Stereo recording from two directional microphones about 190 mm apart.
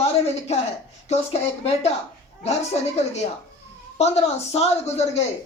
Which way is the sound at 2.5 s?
35° left (ahead or behind).